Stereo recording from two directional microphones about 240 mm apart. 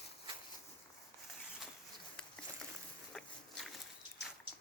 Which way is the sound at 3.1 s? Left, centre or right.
Centre.